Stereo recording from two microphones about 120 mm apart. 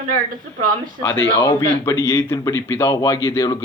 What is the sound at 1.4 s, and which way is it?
Speech, 25° left (ahead or behind).